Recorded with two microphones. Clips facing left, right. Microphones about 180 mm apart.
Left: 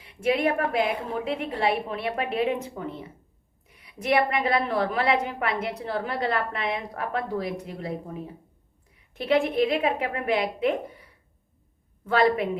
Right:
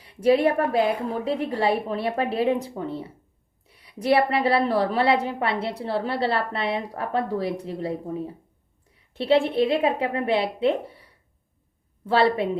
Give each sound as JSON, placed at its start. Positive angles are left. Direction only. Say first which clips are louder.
{"t": 0.0, "sound": "a woman's voice", "louder": "right 5 dB", "side_deg": -35}
{"t": 3.7, "sound": "a sound", "louder": "even", "side_deg": -35}
{"t": 4.0, "sound": "a woman's voice", "louder": "right 3 dB", "side_deg": -30}
{"t": 9.1, "sound": "a woman's voice", "louder": "right 3 dB", "side_deg": -30}